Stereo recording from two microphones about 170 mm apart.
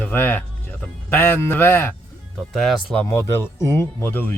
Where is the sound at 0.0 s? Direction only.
10° left (ahead or behind).